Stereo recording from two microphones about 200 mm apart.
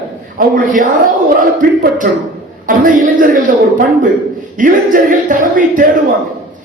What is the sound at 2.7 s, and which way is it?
Speech, 45° right (ahead or behind).